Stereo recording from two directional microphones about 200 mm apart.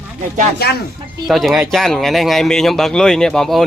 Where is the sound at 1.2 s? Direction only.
Centre (ahead or behind).